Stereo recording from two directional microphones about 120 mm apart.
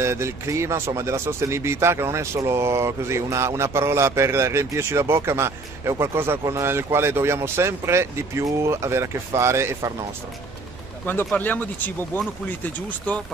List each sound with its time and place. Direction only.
0.0 s speech: 25° right (ahead or behind)
11.3 s speech: 15° left (ahead or behind)